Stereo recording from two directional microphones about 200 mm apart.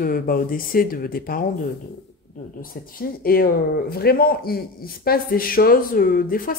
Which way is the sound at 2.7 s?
45° left (ahead or behind).